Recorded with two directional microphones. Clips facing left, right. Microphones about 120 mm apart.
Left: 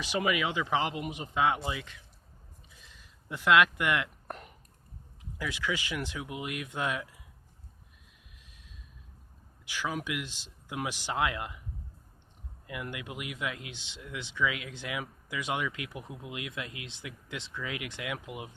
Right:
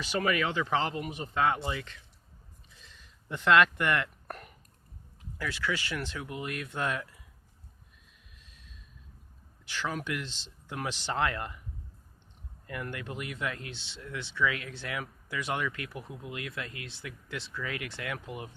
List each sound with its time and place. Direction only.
0.0 s speech: 15° left (ahead or behind)
2.8 s a sound: 10° left (ahead or behind)
5.4 s speech: 15° left (ahead or behind)
8.4 s gasp: 15° left (ahead or behind)
9.6 s speech: 10° left (ahead or behind)
12.6 s speech: 10° left (ahead or behind)